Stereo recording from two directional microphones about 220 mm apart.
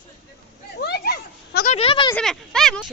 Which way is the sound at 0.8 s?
45° left (ahead or behind).